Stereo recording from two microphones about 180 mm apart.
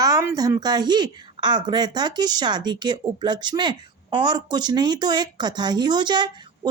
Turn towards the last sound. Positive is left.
turn(degrees=-25)  # may be behind; listen again after turning